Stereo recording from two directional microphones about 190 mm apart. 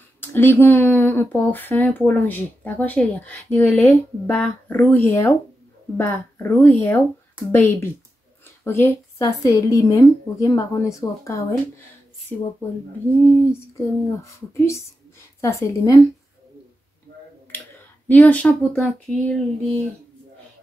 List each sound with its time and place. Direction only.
0.2 s speech: 10° left (ahead or behind)
13.2 s speech: 15° left (ahead or behind)
18.0 s speech: 10° left (ahead or behind)